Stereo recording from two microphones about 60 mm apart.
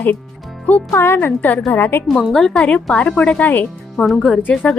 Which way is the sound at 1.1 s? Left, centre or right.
Left.